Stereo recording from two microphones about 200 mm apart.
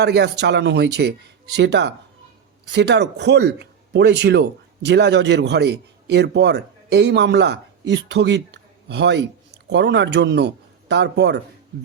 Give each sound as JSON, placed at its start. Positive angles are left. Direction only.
{"t": 0.0, "sound": "a man's voice", "side_deg": -60}